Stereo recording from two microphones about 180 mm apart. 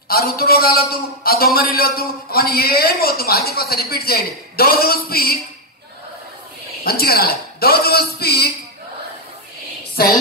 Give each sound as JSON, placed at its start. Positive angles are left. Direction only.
{"t": 0.1, "sound": "a man's voice", "side_deg": 55}
{"t": 6.8, "sound": "a man's voice", "side_deg": 55}
{"t": 10.0, "sound": "a man's voice", "side_deg": 60}